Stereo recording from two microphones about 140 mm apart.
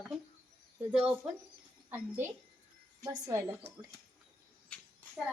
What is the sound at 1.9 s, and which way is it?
A woman's voice, 15° right (ahead or behind).